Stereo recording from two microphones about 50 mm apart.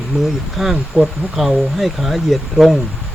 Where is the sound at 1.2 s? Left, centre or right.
Right.